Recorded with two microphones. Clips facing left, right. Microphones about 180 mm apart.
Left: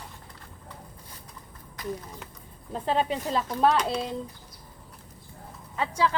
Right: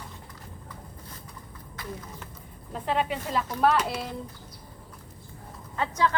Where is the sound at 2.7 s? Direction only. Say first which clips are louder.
Left 1 dB; 30° left (ahead or behind).